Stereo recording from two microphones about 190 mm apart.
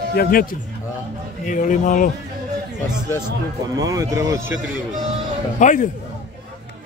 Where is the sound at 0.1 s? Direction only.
50° left (ahead or behind).